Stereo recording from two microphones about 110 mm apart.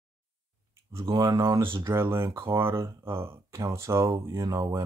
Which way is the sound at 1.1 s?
35° right (ahead or behind).